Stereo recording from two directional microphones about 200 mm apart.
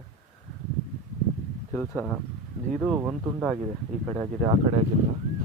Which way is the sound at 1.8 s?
10° left (ahead or behind).